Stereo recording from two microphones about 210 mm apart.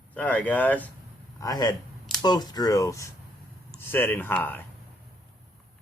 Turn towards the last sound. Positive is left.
turn(degrees=10)  # may be behind; listen again after turning